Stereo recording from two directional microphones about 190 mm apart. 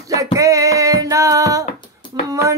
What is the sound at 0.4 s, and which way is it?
Music, 15° right (ahead or behind).